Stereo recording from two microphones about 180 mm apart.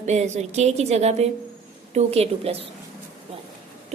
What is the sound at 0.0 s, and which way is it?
A woman's voice, 40° right (ahead or behind).